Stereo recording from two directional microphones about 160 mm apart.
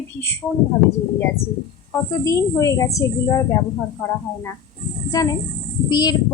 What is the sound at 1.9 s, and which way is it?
A woman's voice, 20° left (ahead or behind).